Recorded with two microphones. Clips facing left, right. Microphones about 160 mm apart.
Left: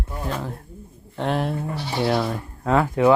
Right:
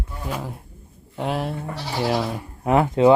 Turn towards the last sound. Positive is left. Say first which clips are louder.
# right 2 dB
turn(degrees=-20)  # may be behind; listen again after turning